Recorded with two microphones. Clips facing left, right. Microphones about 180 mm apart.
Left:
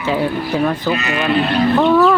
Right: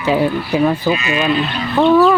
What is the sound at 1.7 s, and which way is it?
Speech, 5° right (ahead or behind).